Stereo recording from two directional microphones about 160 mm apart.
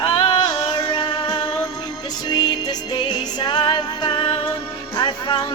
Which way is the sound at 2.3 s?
25° left (ahead or behind).